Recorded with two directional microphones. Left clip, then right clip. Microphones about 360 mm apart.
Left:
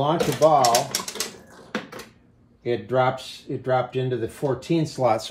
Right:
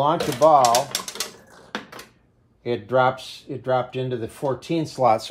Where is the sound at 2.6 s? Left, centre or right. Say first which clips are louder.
Right 2 dB; centre.